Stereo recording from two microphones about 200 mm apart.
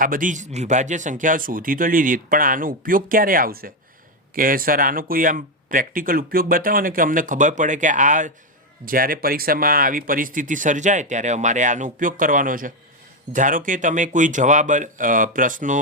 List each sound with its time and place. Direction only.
0.0 s speech: 45° right (ahead or behind)